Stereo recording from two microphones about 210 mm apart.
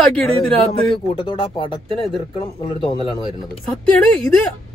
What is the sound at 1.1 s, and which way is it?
Speech, 20° left (ahead or behind).